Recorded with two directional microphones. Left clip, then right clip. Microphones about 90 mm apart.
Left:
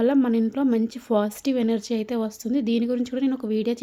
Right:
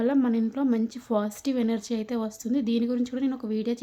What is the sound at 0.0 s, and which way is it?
A woman's voice, 40° left (ahead or behind).